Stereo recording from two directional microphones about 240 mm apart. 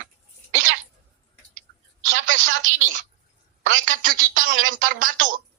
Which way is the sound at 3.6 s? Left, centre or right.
Right.